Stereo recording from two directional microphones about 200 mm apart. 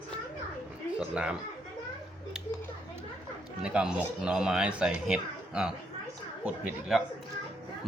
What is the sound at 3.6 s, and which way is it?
Speech, 5° right (ahead or behind).